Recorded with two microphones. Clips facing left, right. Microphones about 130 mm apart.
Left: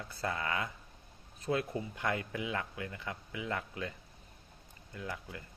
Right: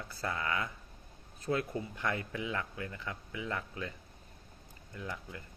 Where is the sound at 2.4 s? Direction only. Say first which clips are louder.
Even; 35° right (ahead or behind).